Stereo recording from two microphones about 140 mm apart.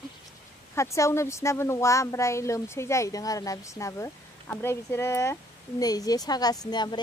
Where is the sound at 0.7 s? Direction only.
20° left (ahead or behind).